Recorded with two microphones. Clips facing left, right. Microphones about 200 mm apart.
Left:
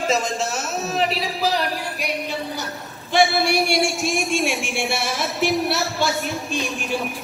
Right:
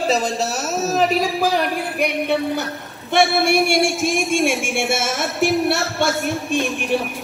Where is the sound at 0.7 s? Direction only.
40° right (ahead or behind).